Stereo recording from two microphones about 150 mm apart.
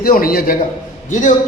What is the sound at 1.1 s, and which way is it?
Speech, 55° left (ahead or behind).